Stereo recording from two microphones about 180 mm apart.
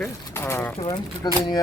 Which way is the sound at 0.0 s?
15° left (ahead or behind).